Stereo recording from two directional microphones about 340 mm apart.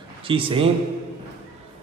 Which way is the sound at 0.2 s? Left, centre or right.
Centre.